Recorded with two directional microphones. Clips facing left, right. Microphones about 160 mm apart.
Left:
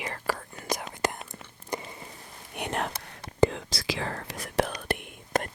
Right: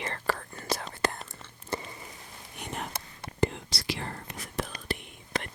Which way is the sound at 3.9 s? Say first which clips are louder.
Left 5 dB; 90° left.